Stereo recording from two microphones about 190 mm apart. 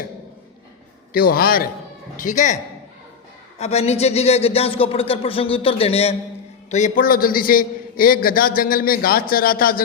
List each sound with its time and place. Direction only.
1.1 s a man's voice: 50° left (ahead or behind)
3.6 s a man's voice: 35° left (ahead or behind); by 9.8 s 50° left (ahead or behind)